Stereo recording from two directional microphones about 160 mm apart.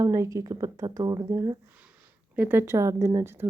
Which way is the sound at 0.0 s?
20° right (ahead or behind).